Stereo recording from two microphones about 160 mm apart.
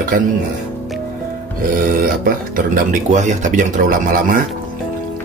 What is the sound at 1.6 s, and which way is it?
Speech, 60° right (ahead or behind).